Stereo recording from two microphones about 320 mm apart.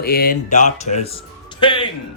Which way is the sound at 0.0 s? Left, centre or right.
Left.